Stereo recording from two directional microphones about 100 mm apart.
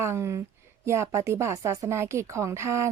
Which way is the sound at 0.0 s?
30° right (ahead or behind).